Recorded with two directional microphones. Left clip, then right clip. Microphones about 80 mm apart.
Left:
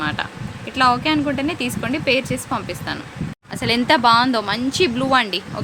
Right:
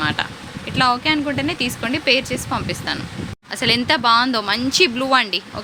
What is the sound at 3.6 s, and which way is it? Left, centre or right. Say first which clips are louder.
Speech: left 1 dB; right.